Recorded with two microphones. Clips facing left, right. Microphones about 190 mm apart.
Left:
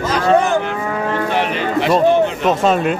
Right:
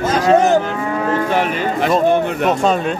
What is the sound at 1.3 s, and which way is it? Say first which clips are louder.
Music: even; 45° right (ahead or behind).